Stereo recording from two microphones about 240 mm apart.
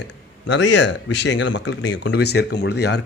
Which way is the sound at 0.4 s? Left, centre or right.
Left.